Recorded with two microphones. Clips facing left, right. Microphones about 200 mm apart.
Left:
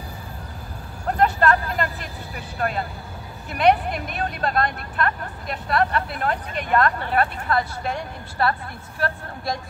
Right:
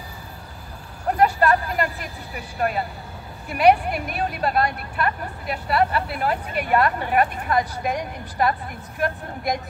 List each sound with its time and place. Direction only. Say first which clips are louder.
1.1 s speech: right 1 dB; 10° right (ahead or behind)
3.4 s speech: right 2 dB; 10° right (ahead or behind)